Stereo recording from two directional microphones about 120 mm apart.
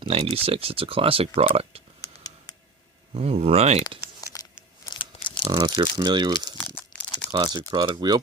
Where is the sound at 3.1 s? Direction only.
55° right (ahead or behind).